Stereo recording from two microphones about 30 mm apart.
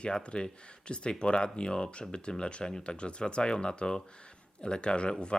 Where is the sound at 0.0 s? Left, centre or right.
Left.